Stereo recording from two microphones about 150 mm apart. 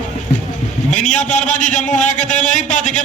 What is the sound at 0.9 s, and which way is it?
A man's voice, 55° left (ahead or behind).